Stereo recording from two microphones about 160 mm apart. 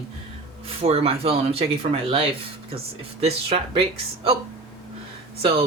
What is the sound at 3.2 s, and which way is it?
Speech, 40° right (ahead or behind).